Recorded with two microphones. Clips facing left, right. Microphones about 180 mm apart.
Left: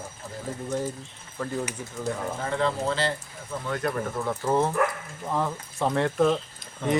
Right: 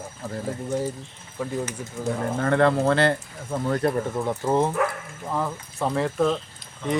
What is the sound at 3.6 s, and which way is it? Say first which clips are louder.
Speech: right 6 dB; 35° right (ahead or behind).